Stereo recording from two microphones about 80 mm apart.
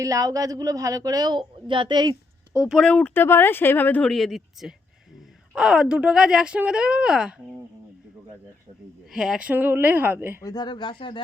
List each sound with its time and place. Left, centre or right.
0.0 s speech: right
2.6 s speech: centre
3.2 s speech: left
4.0 s speech: centre
9.1 s speech: centre
9.6 s a woman's voice: right
10.4 s speech: left